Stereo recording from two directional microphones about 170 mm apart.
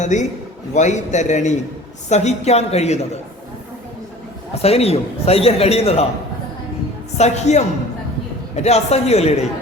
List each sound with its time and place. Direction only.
0.0 s a man's voice: 45° left (ahead or behind)
4.5 s a man's voice: 35° left (ahead or behind)
7.2 s a man's voice: 40° left (ahead or behind)